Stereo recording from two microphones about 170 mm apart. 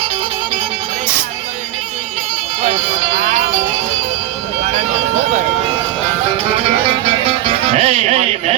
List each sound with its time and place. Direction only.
2.6 s music: 40° right (ahead or behind)
4.6 s a sound: 45° right (ahead or behind)
7.4 s music: 40° right (ahead or behind)